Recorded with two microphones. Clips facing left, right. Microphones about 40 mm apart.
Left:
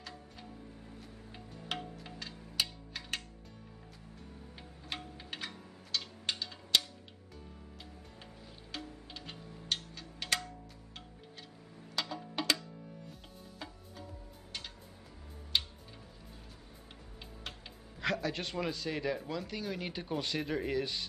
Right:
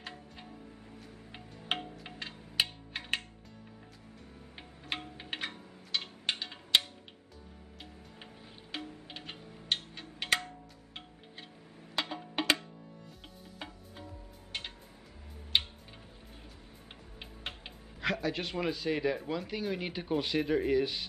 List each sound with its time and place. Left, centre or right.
0.0 s music: right
4.6 s music: right
8.7 s music: right
11.9 s music: right
15.5 s tick-tock: right
17.2 s music: right
18.0 s speech: centre